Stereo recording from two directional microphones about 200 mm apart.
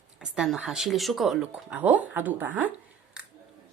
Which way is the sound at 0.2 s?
Centre (ahead or behind).